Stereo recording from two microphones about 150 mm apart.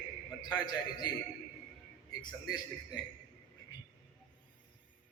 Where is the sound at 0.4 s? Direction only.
30° left (ahead or behind).